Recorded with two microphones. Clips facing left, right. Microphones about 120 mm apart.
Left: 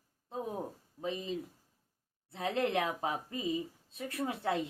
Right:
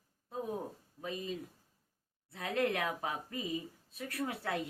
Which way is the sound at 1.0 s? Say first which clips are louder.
Left 3 dB; 25° left (ahead or behind).